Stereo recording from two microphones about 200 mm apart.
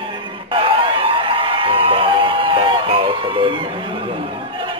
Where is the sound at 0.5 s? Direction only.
25° right (ahead or behind).